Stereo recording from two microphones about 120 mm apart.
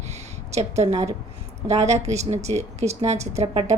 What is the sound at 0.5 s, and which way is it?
A woman's voice, 65° right (ahead or behind).